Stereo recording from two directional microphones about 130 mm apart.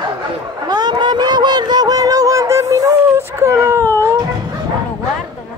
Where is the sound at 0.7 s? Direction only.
30° right (ahead or behind).